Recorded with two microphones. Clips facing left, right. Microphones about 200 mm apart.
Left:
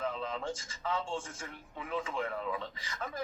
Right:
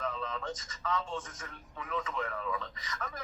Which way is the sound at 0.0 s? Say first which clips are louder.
Left 1 dB; 30° left (ahead or behind).